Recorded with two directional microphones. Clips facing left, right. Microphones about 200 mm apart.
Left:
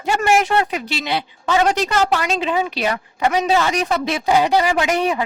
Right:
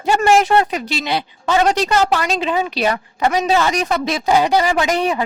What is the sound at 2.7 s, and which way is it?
Speech, 40° right (ahead or behind).